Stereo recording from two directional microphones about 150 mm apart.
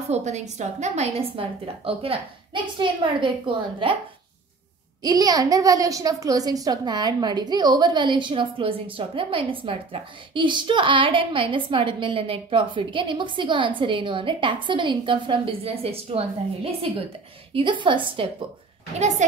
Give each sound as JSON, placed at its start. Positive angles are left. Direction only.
{"t": 0.1, "sound": "a woman's voice", "side_deg": -50}
{"t": 5.0, "sound": "a woman's voice", "side_deg": -25}
{"t": 18.9, "sound": "speech", "side_deg": -50}